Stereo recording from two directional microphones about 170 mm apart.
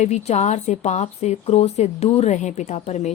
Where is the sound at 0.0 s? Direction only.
40° left (ahead or behind).